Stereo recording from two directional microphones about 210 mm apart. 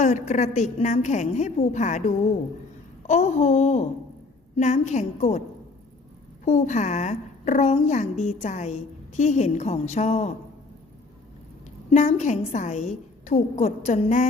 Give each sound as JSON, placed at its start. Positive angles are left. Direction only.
{"t": 0.0, "sound": "a woman's voice", "side_deg": 35}
{"t": 3.1, "sound": "a woman's voice", "side_deg": 35}
{"t": 6.4, "sound": "a woman's voice", "side_deg": 35}
{"t": 11.9, "sound": "a woman's voice", "side_deg": 35}